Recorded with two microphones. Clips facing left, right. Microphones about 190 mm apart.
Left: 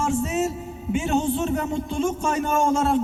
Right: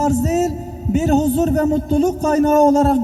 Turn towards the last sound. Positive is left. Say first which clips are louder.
# right 8 dB
turn(degrees=-40)  # may be behind; listen again after turning